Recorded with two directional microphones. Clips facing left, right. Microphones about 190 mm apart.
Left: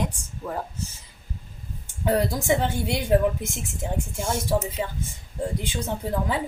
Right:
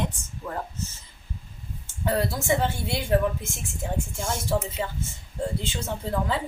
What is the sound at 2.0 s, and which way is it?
Speech, 15° left (ahead or behind).